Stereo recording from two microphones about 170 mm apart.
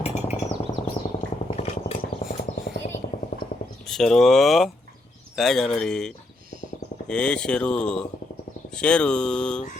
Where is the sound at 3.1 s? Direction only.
55° left (ahead or behind).